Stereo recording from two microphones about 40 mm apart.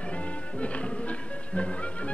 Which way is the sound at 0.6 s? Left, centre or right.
Left.